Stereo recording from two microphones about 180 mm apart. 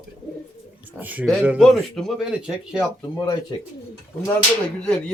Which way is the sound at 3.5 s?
30° left (ahead or behind).